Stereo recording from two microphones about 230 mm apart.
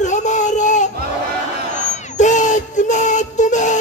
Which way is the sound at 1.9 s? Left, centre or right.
Left.